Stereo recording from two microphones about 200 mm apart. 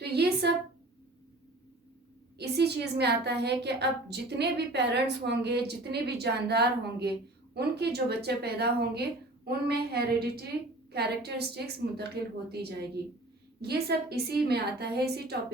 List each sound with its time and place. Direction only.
0.0 s a woman's voice: 55° right (ahead or behind)
2.4 s a woman's voice: 55° right (ahead or behind)
13.6 s speech: 50° right (ahead or behind)